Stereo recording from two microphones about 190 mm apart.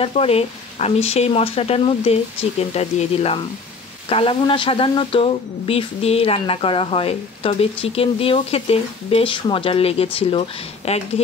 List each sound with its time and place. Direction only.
0.0 s speech: 30° left (ahead or behind)